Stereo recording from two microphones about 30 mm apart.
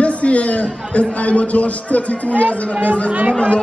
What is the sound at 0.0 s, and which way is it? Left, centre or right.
A man's voice, left.